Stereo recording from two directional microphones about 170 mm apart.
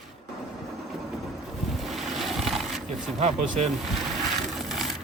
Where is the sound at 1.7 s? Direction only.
Centre (ahead or behind).